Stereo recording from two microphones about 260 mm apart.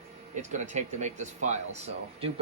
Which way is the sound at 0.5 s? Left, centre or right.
Right.